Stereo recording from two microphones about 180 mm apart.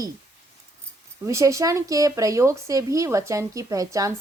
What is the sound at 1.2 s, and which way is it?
Speech, 15° right (ahead or behind).